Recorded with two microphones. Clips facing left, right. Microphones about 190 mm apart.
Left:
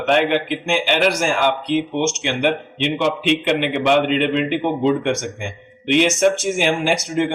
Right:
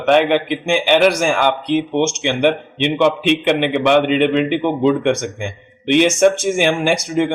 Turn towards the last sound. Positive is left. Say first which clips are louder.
# right 2 dB
turn(degrees=-55)  # may be behind; listen again after turning